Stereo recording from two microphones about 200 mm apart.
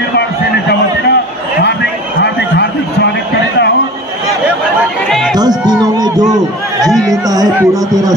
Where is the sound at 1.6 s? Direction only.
55° left (ahead or behind).